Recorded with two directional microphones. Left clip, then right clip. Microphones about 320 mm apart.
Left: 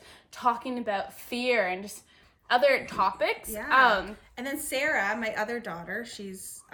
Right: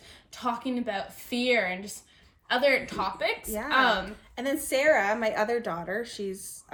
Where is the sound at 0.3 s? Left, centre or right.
Centre.